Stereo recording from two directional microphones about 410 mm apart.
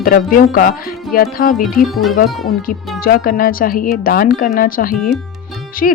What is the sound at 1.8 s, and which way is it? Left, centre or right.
Speech, centre.